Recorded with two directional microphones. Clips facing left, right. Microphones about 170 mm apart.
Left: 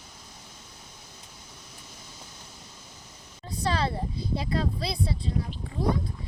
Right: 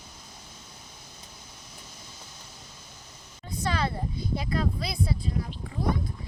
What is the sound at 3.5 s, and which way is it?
Speech, 35° left (ahead or behind).